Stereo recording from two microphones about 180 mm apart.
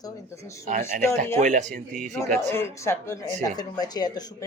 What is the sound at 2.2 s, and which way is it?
Speech, 15° left (ahead or behind).